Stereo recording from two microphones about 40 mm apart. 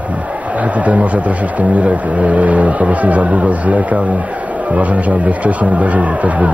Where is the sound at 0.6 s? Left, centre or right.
Right.